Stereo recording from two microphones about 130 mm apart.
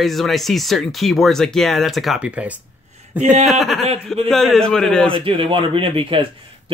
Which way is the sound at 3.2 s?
65° right (ahead or behind).